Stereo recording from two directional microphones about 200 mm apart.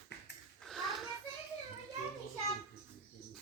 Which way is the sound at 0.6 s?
Centre (ahead or behind).